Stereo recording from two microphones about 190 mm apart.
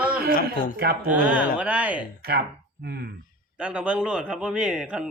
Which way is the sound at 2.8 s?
55° right (ahead or behind).